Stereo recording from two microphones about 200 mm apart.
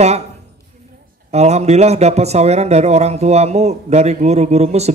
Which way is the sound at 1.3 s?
35° right (ahead or behind).